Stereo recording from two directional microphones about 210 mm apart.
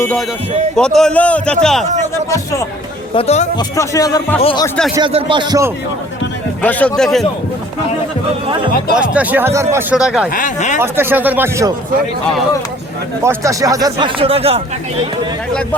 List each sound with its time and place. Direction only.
0.0 s a man's voice: 10° left (ahead or behind)
2.3 s a man's voice: 15° left (ahead or behind)
3.2 s speech: 30° left (ahead or behind)
3.6 s a man's voice: 15° left (ahead or behind)
4.4 s speech: 25° left (ahead or behind)
4.9 s speech: 25° right (ahead or behind)
6.6 s a man's voice: 10° left (ahead or behind)
9.0 s a man's voice: 5° right (ahead or behind)
10.3 s speech: 35° left (ahead or behind)
10.8 s speech: 10° right (ahead or behind)
13.2 s speech: 15° right (ahead or behind)